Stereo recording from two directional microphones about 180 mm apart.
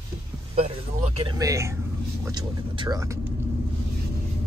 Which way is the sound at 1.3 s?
15° right (ahead or behind).